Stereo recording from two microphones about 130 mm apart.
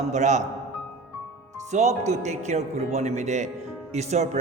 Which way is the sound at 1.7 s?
65° right (ahead or behind).